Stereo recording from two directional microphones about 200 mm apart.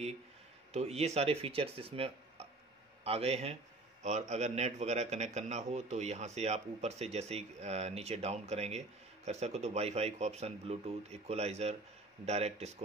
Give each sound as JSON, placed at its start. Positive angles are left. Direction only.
{"t": 0.7, "sound": "a man's voice", "side_deg": -30}